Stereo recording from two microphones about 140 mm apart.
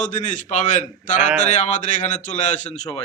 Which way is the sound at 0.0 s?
60° left (ahead or behind).